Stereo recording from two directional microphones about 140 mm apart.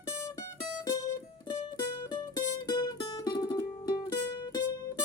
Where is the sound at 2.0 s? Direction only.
30° left (ahead or behind).